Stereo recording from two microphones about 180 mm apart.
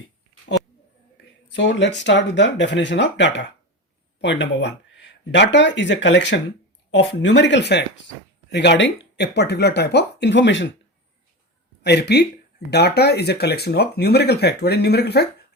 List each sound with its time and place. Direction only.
1.5 s speech: 80° left
11.8 s speech: 65° left (ahead or behind)